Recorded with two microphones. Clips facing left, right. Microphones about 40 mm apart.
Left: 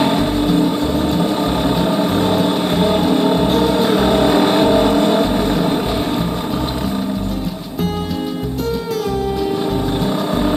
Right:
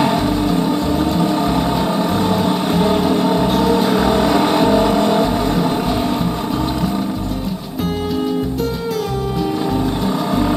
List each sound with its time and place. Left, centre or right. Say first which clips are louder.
0.0 s music: even; left
4.0 s a sound: left 1 dB; left
10.0 s music: even; left